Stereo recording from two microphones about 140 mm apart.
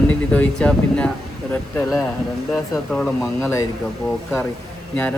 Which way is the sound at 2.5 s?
5° left (ahead or behind).